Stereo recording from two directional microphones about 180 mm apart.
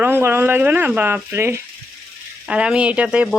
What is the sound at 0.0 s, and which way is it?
Speech, 10° right (ahead or behind).